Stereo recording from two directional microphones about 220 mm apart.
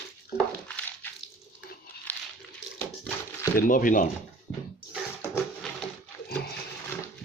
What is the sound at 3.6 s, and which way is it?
Speech, 40° left (ahead or behind).